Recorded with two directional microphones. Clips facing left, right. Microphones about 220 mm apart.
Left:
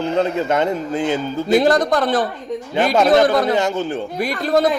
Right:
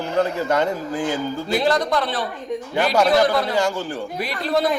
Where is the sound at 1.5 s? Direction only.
45° left (ahead or behind).